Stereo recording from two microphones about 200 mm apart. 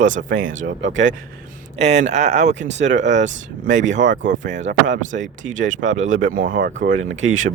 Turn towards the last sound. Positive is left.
turn(degrees=-75)  # may be behind; listen again after turning